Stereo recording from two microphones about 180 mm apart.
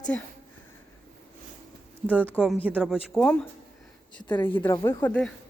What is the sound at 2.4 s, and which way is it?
Speech, 5° right (ahead or behind).